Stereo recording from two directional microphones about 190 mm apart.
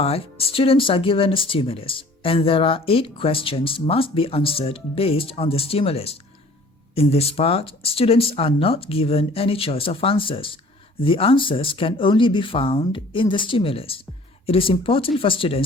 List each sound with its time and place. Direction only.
0.0 s speech: 30° left (ahead or behind)